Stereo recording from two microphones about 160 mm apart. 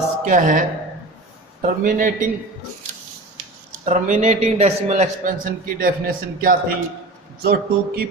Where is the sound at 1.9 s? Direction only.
55° right (ahead or behind).